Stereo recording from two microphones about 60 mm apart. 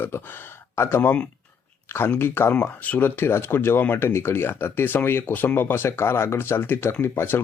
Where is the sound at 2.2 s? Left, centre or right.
Left.